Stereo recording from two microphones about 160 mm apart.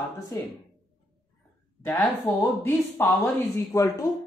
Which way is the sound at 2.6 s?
15° left (ahead or behind).